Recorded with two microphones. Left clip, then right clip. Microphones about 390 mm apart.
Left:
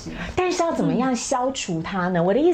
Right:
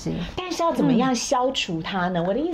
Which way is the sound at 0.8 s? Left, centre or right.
Centre.